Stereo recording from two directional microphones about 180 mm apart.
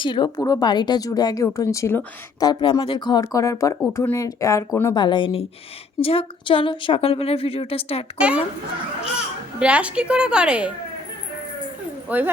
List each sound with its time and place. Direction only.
0.0 s a woman's voice: 25° left (ahead or behind)
9.6 s a woman's voice: 5° right (ahead or behind)
12.0 s speech: 10° right (ahead or behind)